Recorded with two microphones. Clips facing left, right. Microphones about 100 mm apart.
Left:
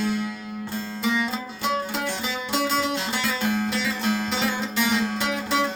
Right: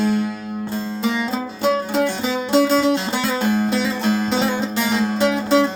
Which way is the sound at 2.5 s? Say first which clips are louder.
Right 9 dB; 30° right (ahead or behind).